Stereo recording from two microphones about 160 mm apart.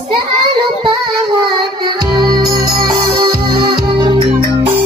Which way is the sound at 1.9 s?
25° right (ahead or behind).